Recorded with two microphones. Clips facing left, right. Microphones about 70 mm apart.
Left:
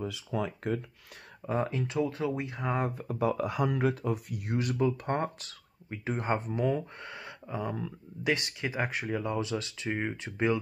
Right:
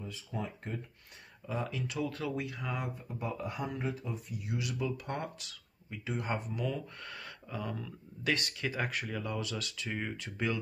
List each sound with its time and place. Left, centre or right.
0.0 s speech: left
1.5 s speech: left
3.0 s speech: left
4.6 s speech: left
7.0 s speech: left